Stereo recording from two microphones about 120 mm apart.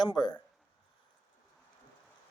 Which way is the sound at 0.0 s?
40° left (ahead or behind).